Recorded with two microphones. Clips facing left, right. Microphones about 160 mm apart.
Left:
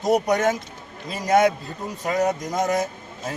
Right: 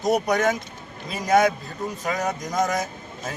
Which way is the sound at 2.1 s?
25° left (ahead or behind).